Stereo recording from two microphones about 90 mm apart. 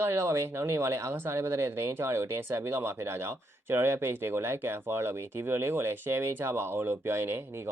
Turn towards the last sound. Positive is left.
turn(degrees=-30)  # may be behind; listen again after turning